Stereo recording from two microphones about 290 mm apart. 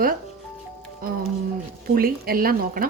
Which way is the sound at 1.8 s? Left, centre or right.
Right.